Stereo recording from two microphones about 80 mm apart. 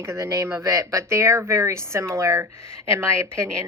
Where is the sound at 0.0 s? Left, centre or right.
Right.